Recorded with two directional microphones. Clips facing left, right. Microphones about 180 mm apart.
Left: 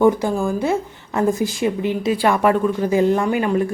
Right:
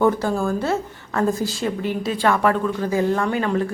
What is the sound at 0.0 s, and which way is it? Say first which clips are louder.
Speech: left 3 dB; 15° left (ahead or behind).